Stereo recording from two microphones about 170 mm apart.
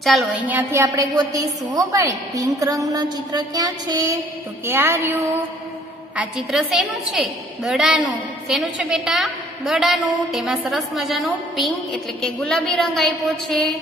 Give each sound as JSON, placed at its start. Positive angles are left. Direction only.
{"t": 0.0, "sound": "a woman's voice", "side_deg": 0}
{"t": 0.5, "sound": "a woman's voice", "side_deg": -15}
{"t": 6.1, "sound": "a woman's voice", "side_deg": 0}